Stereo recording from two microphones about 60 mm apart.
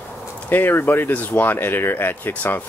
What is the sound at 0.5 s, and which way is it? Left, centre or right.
Speech, left.